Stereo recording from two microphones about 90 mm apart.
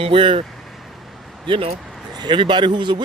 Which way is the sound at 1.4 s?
70° right (ahead or behind).